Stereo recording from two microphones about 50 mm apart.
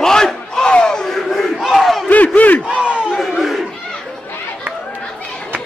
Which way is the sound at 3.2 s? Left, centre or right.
Centre.